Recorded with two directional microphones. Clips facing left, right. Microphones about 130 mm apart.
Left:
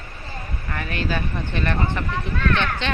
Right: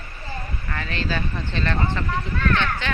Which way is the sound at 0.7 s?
10° left (ahead or behind).